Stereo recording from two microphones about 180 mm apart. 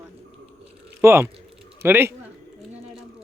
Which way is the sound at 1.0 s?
15° right (ahead or behind).